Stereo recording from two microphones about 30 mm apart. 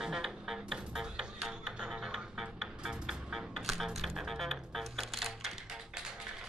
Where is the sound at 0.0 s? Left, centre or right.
Centre.